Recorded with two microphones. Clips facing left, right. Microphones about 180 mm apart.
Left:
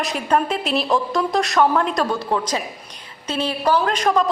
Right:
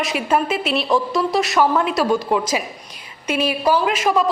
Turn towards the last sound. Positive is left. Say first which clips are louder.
# right 1 dB
turn(degrees=-5)  # may be behind; listen again after turning